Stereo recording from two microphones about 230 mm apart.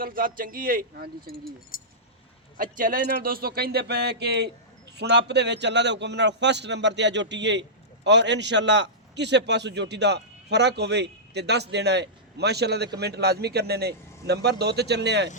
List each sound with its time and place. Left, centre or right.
0.0 s speech: right
1.7 s a sound: left
2.6 s a man's voice: right